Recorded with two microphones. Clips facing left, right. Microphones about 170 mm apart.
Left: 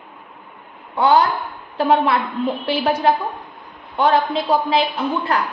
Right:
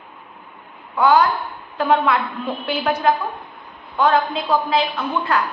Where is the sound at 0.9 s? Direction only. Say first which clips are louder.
Even; 30° left (ahead or behind).